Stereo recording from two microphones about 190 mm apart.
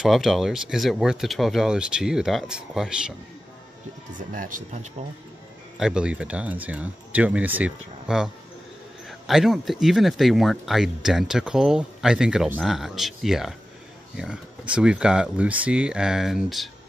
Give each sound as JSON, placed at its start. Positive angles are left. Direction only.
{"t": 0.0, "sound": "speech", "side_deg": 0}
{"t": 5.8, "sound": "speech", "side_deg": -5}
{"t": 9.3, "sound": "speech", "side_deg": 0}